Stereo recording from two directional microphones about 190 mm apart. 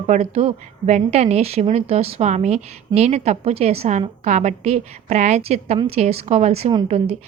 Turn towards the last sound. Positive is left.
turn(degrees=-35)  # may be behind; listen again after turning